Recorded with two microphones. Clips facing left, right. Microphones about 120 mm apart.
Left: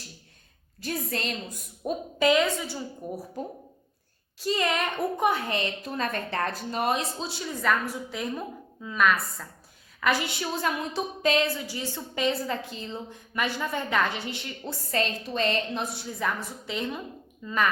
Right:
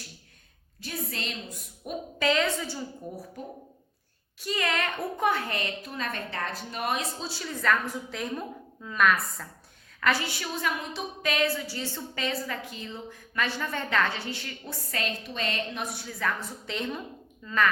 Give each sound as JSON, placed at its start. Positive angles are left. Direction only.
{"t": 0.8, "sound": "a woman's voice", "side_deg": 45}
{"t": 1.8, "sound": "a woman's voice", "side_deg": 35}
{"t": 2.2, "sound": "a woman's voice", "side_deg": 15}
{"t": 4.4, "sound": "a woman's voice", "side_deg": 30}
{"t": 4.7, "sound": "a woman's voice", "side_deg": 15}
{"t": 5.8, "sound": "a woman's voice", "side_deg": 40}
{"t": 7.2, "sound": "a woman's voice", "side_deg": 20}
{"t": 7.6, "sound": "a woman's voice", "side_deg": 5}
{"t": 10.0, "sound": "a woman's voice", "side_deg": 15}
{"t": 13.3, "sound": "a woman's voice", "side_deg": 15}
{"t": 14.8, "sound": "a woman's voice", "side_deg": 35}
{"t": 16.6, "sound": "a woman's voice", "side_deg": 5}
{"t": 17.4, "sound": "a woman's voice", "side_deg": 15}